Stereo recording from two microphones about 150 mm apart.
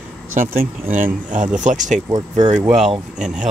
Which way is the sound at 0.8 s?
15° right (ahead or behind).